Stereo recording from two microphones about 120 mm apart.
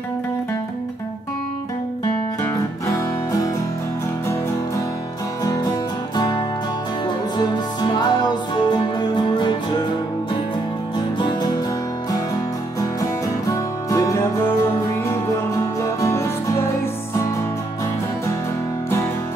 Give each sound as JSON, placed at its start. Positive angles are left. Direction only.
{"t": 2.4, "sound": "music", "side_deg": 25}
{"t": 5.4, "sound": "music", "side_deg": 30}
{"t": 13.5, "sound": "music", "side_deg": 25}
{"t": 16.0, "sound": "music", "side_deg": 25}